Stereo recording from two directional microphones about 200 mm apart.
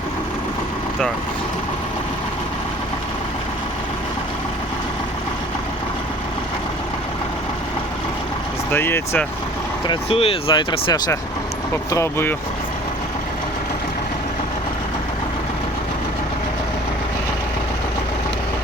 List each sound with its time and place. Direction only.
8.7 s speech: 10° left (ahead or behind)
9.8 s speech: 25° left (ahead or behind)